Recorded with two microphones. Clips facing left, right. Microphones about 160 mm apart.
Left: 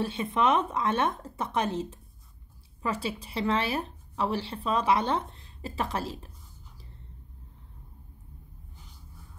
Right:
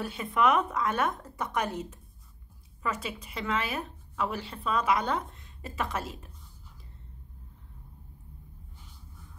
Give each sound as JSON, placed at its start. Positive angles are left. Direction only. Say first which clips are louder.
{"t": 0.0, "sound": "a woman's voice", "louder": "even", "side_deg": 25}